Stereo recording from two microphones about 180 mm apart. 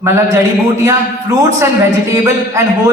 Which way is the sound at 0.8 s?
15° right (ahead or behind).